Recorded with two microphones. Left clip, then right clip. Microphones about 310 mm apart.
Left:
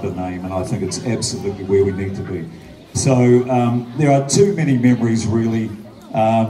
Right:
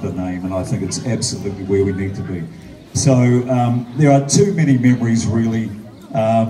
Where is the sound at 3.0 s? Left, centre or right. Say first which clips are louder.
Left 2 dB; centre.